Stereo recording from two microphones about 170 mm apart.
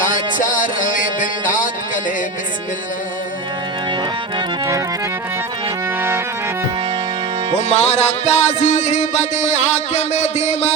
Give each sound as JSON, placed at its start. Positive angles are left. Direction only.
{"t": 0.0, "sound": "music", "side_deg": 50}
{"t": 4.4, "sound": "accordion", "side_deg": -25}
{"t": 6.0, "sound": "accordion", "side_deg": -15}
{"t": 7.5, "sound": "music", "side_deg": 40}